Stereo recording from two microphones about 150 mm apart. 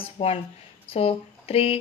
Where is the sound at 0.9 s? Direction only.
40° left (ahead or behind).